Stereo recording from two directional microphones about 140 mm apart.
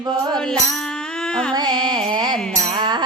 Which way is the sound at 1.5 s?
30° right (ahead or behind).